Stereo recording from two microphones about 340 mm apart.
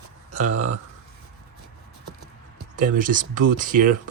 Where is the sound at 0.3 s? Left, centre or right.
Centre.